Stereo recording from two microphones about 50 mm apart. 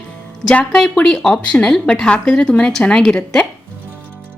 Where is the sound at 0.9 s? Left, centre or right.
Centre.